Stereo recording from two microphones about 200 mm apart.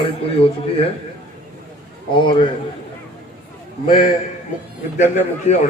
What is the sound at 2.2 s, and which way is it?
Speech, 25° left (ahead or behind).